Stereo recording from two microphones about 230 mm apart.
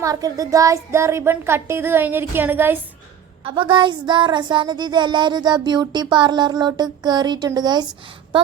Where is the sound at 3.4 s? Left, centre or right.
Right.